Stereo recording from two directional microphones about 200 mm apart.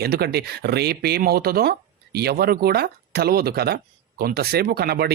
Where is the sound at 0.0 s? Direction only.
55° right (ahead or behind).